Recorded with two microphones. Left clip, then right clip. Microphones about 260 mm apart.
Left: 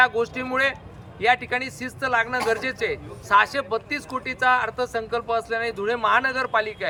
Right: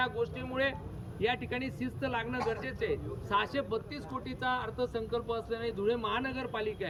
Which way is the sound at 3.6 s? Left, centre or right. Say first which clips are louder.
Left 8 dB; left.